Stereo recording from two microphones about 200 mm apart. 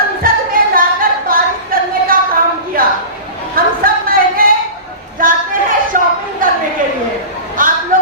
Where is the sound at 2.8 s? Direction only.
45° right (ahead or behind).